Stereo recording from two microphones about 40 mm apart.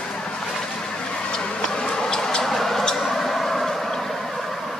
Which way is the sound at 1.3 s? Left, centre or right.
Centre.